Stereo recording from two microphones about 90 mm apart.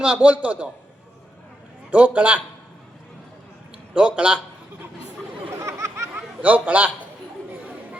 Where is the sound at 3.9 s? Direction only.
10° right (ahead or behind).